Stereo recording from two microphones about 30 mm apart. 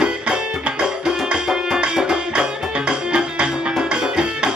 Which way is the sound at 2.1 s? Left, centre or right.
Right.